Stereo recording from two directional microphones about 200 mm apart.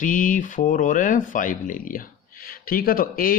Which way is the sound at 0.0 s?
40° left (ahead or behind).